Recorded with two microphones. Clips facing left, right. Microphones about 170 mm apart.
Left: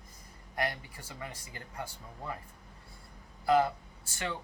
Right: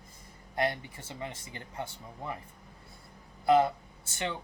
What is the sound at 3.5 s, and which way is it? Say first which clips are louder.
Speech: right 3 dB; 20° right (ahead or behind).